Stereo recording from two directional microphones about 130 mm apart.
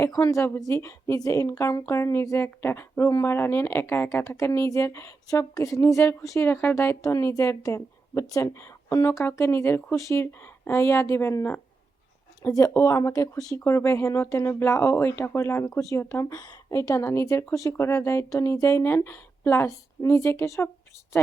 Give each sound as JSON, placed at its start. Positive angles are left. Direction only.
{"t": 0.0, "sound": "a woman's voice", "side_deg": 25}